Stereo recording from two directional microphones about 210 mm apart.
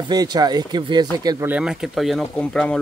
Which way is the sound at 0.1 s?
20° right (ahead or behind).